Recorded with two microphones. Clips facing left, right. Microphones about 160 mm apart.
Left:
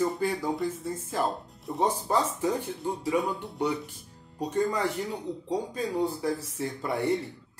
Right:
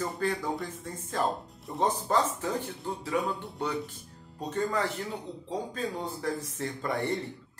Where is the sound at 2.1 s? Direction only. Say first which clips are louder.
Left 2 dB; 10° left (ahead or behind).